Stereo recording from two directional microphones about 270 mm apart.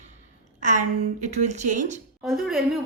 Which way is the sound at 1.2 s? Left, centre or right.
Right.